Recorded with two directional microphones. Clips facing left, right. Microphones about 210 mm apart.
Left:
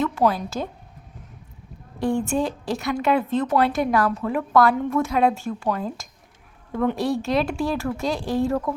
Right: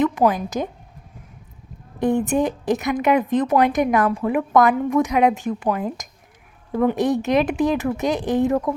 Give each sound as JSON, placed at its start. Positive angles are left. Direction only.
{"t": 0.0, "sound": "a woman's voice", "side_deg": -15}
{"t": 2.0, "sound": "a woman's voice", "side_deg": -20}